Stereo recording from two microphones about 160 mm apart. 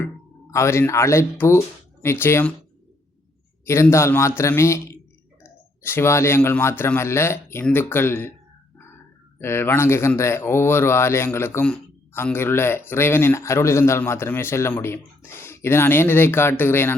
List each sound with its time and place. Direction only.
0.5 s speech: 15° left (ahead or behind)
3.7 s speech: 15° left (ahead or behind)
9.4 s speech: 15° left (ahead or behind)